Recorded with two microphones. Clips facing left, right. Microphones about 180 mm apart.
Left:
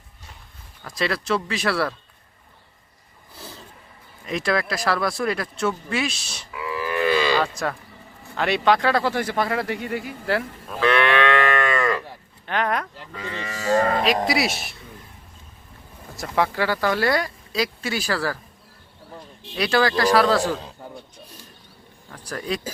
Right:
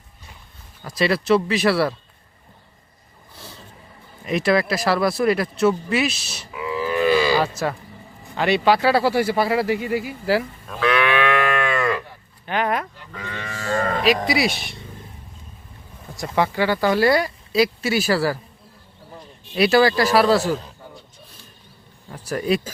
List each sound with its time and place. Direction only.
0.9 s speech: 5° right (ahead or behind)
4.3 s speech: 5° right (ahead or behind)
6.5 s livestock: 20° right (ahead or behind)
7.4 s speech: 5° right (ahead or behind)
14.3 s speech: centre (ahead or behind)
16.1 s speech: centre (ahead or behind)
19.5 s a man's voice: 5° right (ahead or behind)
22.1 s speech: 5° right (ahead or behind)